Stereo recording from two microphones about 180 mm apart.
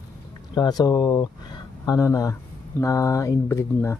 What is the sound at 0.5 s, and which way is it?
Speech, 25° left (ahead or behind).